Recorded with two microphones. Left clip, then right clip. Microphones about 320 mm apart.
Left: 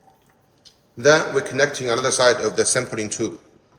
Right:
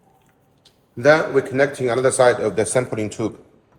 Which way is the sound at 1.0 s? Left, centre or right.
Right.